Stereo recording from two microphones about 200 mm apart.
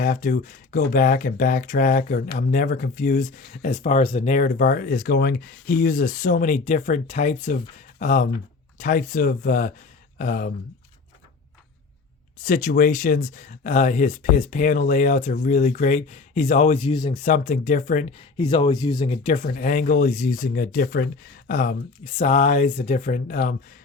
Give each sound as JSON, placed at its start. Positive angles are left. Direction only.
{"t": 0.0, "sound": "speech", "side_deg": 45}
{"t": 12.4, "sound": "speech", "side_deg": 40}
{"t": 17.2, "sound": "speech", "side_deg": 40}
{"t": 18.3, "sound": "speech", "side_deg": 25}
{"t": 18.9, "sound": "speech", "side_deg": 30}